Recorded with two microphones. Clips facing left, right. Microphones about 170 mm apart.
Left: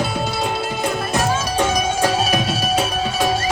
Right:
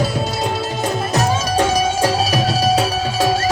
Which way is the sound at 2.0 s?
35° right (ahead or behind).